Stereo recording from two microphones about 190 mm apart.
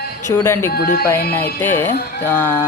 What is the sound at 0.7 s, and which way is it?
Music, 55° left (ahead or behind).